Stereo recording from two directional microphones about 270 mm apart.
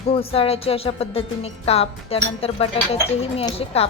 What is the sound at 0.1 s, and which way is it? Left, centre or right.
Speech, left.